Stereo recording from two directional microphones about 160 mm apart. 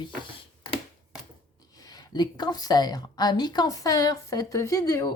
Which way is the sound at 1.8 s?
25° left (ahead or behind).